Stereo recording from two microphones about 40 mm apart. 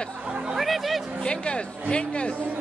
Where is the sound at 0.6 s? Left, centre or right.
Centre.